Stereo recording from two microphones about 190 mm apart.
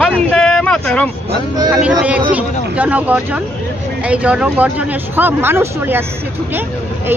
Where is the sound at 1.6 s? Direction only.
5° right (ahead or behind).